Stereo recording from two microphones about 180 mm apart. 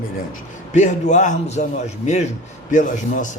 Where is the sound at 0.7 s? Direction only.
40° left (ahead or behind).